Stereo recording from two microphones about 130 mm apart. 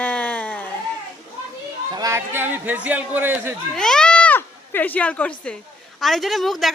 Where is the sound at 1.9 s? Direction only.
25° right (ahead or behind).